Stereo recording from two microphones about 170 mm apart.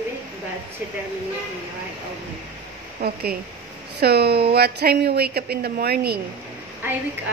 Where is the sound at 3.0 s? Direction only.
70° right (ahead or behind).